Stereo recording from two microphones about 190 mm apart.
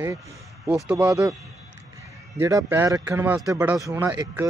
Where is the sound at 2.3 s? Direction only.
15° right (ahead or behind).